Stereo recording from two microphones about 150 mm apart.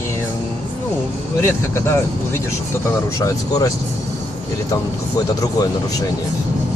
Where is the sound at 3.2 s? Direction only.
20° left (ahead or behind).